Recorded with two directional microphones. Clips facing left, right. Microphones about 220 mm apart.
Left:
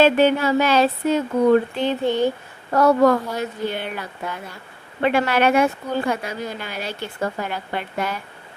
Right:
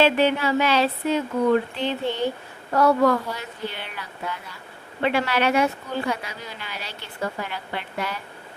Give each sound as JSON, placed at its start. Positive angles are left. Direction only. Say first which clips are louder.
{"t": 0.0, "sound": "a woman's voice", "louder": "left 4 dB", "side_deg": 45}